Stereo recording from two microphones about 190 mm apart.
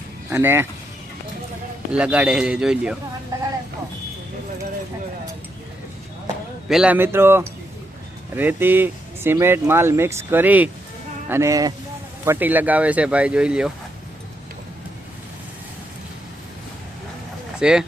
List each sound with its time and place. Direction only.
0.3 s speech: 10° right (ahead or behind)
1.9 s a man's voice: 5° right (ahead or behind)
6.7 s speech: 5° right (ahead or behind)
17.6 s a man's voice: 5° right (ahead or behind)